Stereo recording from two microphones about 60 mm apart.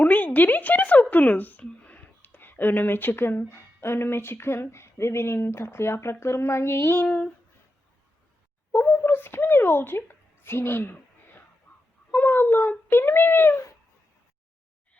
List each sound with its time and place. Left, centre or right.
0.0 s a woman's voice: left
8.7 s speech: left
11.7 s goose: left
12.1 s speech: left